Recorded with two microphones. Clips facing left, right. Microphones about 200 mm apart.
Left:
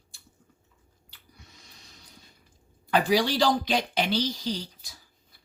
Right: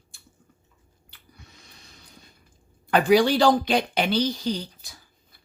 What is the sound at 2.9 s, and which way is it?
Speech, 55° right (ahead or behind).